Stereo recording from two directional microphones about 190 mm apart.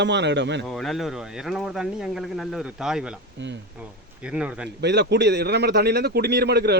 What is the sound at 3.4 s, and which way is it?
Speech, 70° right (ahead or behind).